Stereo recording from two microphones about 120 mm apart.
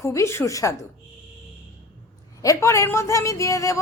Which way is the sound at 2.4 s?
25° left (ahead or behind).